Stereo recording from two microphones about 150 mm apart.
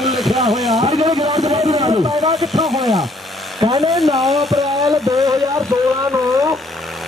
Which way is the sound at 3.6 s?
25° right (ahead or behind).